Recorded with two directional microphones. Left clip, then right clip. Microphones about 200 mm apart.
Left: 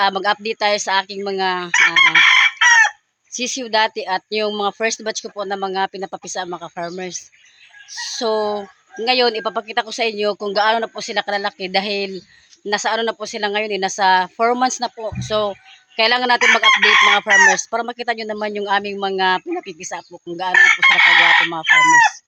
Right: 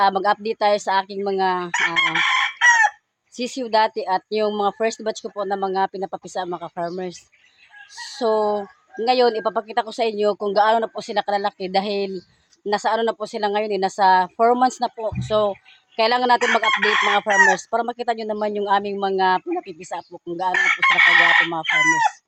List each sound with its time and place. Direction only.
0.0 s speech: 5° right (ahead or behind)
2.0 s chicken: 30° right (ahead or behind)
3.3 s speech: 5° right (ahead or behind)
8.2 s speech: centre (ahead or behind)
20.5 s chicken: 55° right (ahead or behind)